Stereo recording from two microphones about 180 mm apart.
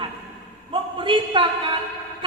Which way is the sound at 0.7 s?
30° right (ahead or behind).